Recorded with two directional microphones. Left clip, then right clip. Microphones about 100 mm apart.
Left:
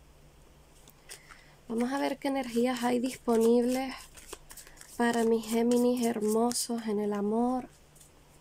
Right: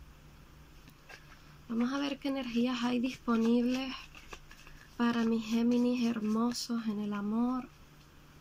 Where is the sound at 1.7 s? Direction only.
65° left (ahead or behind).